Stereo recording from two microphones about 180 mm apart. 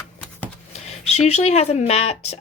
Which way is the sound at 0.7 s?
35° left (ahead or behind).